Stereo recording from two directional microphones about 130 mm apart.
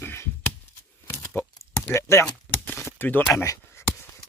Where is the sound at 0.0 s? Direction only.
15° left (ahead or behind).